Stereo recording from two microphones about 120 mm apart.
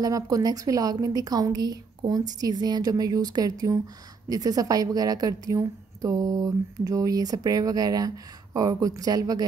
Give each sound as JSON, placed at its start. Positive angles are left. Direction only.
{"t": 0.0, "sound": "a woman's voice", "side_deg": -30}